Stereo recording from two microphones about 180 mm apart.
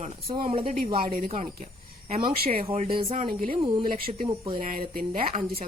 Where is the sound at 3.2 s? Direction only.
50° right (ahead or behind).